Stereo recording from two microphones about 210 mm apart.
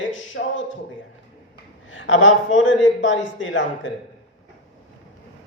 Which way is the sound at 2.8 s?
65° left (ahead or behind).